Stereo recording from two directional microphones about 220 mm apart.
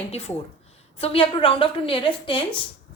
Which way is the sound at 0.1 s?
30° left (ahead or behind).